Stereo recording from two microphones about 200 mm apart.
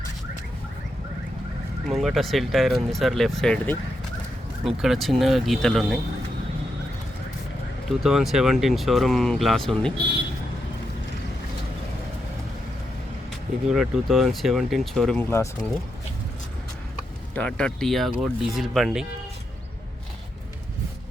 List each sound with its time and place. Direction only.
1.9 s speech: centre (ahead or behind)
7.9 s speech: centre (ahead or behind)
13.7 s speech: 5° right (ahead or behind)
17.3 s speech: 5° left (ahead or behind)